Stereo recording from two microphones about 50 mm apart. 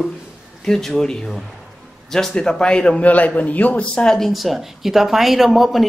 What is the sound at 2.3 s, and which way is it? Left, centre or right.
Speech, centre.